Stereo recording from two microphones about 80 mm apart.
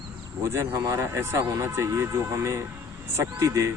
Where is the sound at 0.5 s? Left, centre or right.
Right.